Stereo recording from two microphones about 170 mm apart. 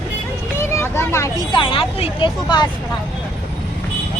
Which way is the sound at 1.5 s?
30° left (ahead or behind).